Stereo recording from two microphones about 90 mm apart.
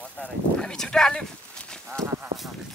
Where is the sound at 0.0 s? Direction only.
10° left (ahead or behind).